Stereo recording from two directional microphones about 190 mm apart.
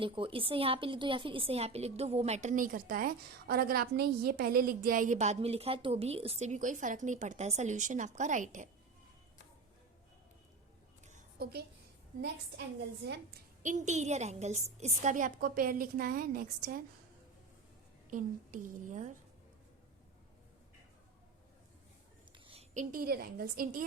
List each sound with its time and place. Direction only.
0.0 s a woman's voice: 30° right (ahead or behind)
13.6 s a woman's voice: 40° right (ahead or behind)
18.1 s a woman's voice: 45° right (ahead or behind)
22.4 s a woman's voice: 35° right (ahead or behind)